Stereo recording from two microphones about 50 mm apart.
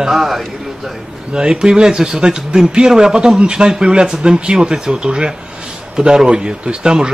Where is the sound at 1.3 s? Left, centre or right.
Centre.